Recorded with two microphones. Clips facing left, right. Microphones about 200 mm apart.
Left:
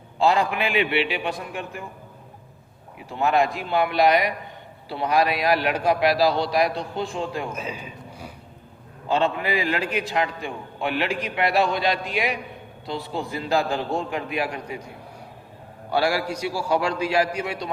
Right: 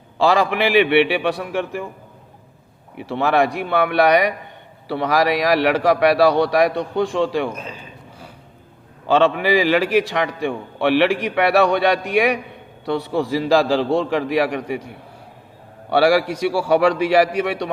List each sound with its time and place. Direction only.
0.2 s a man's voice: 90° right; by 1.6 s 75° right (ahead or behind)
3.1 s a man's voice: 85° right; by 4.4 s 65° right (ahead or behind)
4.9 s a man's voice: 85° right
7.5 s a sound: 10° left (ahead or behind)
9.0 s a man's voice: 90° right; by 17.7 s 75° right (ahead or behind)